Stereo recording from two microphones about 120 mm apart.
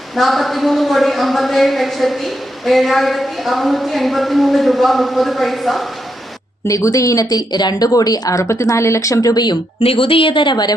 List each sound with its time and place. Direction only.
0.2 s a woman's voice: centre (ahead or behind)
6.7 s speech: 25° left (ahead or behind)
9.8 s speech: 50° left (ahead or behind)